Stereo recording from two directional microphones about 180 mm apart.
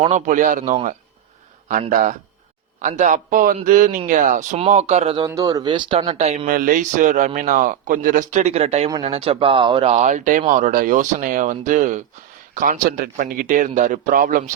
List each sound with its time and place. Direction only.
0.0 s a man's voice: 40° right (ahead or behind)
5.3 s speech: 20° right (ahead or behind); by 6.5 s 35° right (ahead or behind)
6.5 s a man's voice: 50° right (ahead or behind)